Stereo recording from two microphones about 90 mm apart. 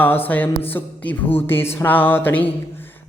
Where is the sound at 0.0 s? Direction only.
20° left (ahead or behind).